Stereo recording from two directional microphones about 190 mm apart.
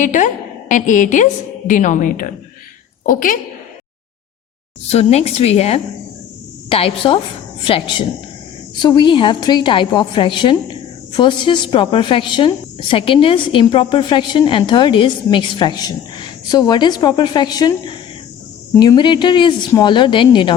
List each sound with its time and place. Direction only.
0.0 s a woman's voice: 40° left (ahead or behind)
4.9 s a woman's voice: 35° left (ahead or behind)